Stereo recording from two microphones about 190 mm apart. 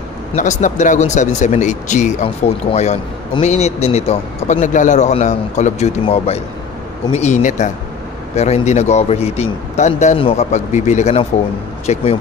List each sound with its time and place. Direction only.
0.3 s speech: 40° left (ahead or behind)